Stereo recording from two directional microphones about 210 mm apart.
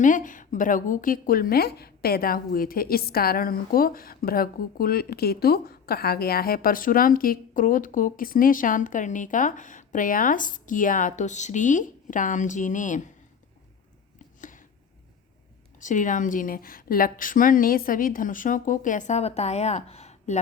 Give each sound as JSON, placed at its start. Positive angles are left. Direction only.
{"t": 0.0, "sound": "a woman's voice", "side_deg": 40}
{"t": 15.8, "sound": "a woman's voice", "side_deg": 35}